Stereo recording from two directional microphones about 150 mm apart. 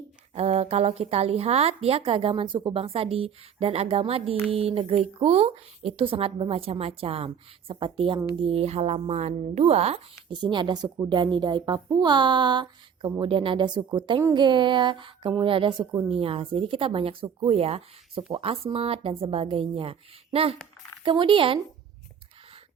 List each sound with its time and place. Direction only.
0.3 s speech: 45° right (ahead or behind)
10.3 s speech: 30° right (ahead or behind)
15.8 s speech: 25° right (ahead or behind)
16.0 s speech: 40° right (ahead or behind)